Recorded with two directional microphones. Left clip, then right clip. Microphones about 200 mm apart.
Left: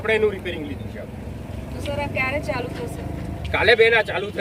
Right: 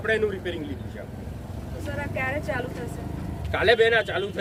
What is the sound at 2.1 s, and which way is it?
Speech, 20° left (ahead or behind).